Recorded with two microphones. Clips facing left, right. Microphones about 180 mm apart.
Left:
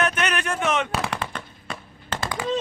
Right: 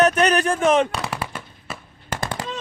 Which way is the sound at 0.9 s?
5° right (ahead or behind).